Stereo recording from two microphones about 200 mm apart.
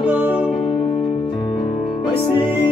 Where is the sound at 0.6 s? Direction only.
30° left (ahead or behind).